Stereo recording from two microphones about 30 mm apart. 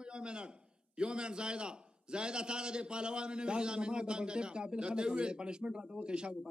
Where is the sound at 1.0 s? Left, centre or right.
Right.